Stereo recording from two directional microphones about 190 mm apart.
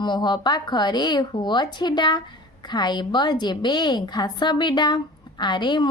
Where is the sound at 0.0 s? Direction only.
25° left (ahead or behind).